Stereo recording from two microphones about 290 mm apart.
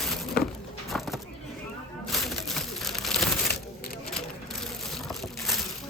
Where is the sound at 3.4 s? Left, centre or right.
Left.